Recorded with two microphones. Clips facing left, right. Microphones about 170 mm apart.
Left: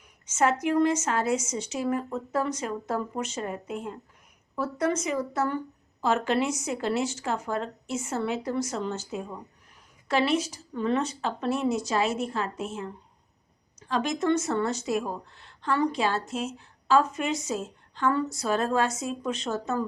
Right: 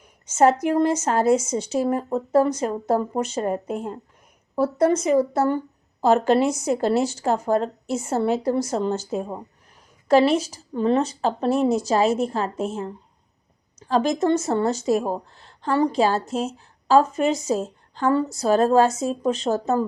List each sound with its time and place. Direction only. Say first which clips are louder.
0.3 s speech: right 7 dB; 35° right (ahead or behind)